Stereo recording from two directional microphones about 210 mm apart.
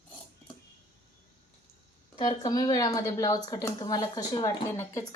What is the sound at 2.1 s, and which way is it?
Speech, 20° left (ahead or behind).